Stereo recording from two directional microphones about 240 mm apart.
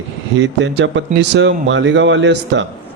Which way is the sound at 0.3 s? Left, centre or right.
Right.